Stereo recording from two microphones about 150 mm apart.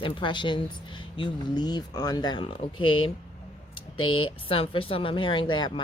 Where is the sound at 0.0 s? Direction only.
30° left (ahead or behind).